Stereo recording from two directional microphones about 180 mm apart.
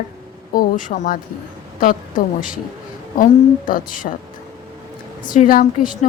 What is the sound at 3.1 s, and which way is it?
Speech, 50° left (ahead or behind).